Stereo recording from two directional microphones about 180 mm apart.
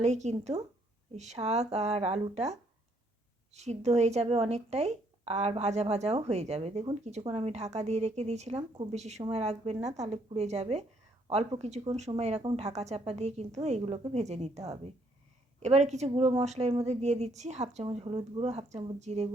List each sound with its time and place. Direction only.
0.0 s speech: 40° right (ahead or behind)
15.6 s speech: 40° right (ahead or behind)